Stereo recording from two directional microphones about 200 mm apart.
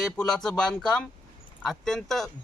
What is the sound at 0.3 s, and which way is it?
Speech, 5° left (ahead or behind).